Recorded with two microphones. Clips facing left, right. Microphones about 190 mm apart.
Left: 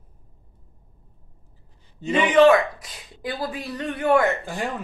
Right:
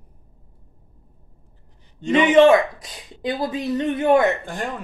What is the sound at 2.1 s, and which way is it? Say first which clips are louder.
Speech: right 2 dB; 20° right (ahead or behind).